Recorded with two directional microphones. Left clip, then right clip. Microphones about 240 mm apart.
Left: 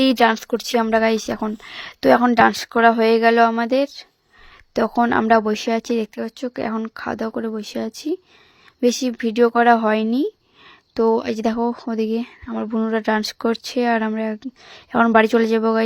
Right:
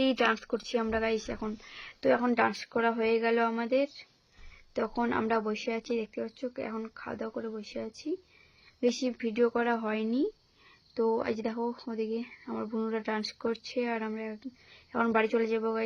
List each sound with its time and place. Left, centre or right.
0.0 s speech: left